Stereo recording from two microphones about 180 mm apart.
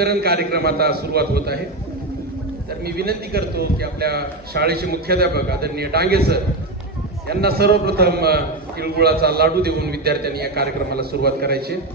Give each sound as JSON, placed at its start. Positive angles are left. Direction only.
{"t": 0.0, "sound": "a man's voice", "side_deg": -60}
{"t": 2.9, "sound": "a man's voice", "side_deg": -60}